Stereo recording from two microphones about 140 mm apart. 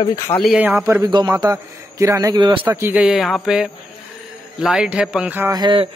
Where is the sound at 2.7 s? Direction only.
15° right (ahead or behind).